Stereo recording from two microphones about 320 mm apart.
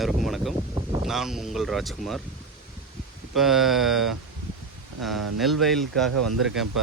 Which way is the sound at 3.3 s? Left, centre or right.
Centre.